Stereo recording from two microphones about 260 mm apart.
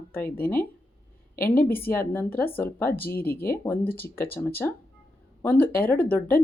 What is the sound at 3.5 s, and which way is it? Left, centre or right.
Speech, centre.